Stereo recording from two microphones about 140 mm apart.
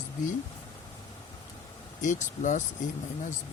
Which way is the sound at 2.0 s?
65° left (ahead or behind).